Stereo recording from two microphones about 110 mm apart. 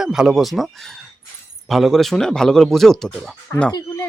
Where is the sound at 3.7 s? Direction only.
35° left (ahead or behind).